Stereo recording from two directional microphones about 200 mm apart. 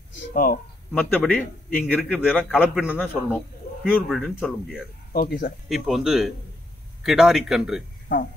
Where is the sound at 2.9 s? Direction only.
10° left (ahead or behind).